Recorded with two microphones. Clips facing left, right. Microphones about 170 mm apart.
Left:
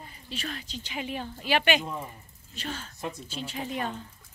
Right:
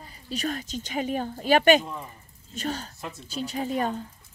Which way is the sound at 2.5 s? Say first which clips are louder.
Right 6 dB; 40° right (ahead or behind).